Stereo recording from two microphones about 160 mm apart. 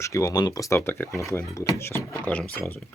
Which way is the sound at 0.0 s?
20° left (ahead or behind).